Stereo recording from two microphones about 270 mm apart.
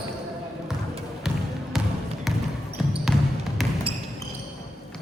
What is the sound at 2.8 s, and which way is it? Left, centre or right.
Basketball bounce, centre.